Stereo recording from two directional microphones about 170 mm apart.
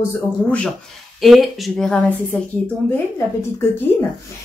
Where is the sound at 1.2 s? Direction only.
Centre (ahead or behind).